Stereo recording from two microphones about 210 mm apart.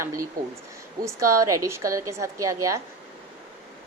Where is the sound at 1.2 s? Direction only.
90° right.